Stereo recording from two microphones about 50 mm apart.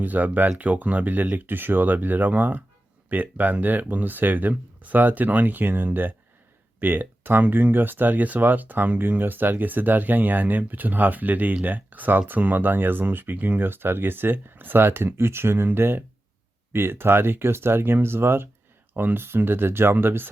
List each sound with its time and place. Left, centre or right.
0.0 s speech: right